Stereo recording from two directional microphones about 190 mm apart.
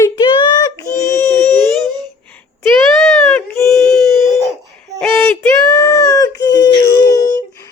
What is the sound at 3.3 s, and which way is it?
Baby cry, 10° left (ahead or behind).